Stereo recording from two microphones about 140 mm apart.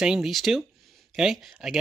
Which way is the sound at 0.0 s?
5° right (ahead or behind).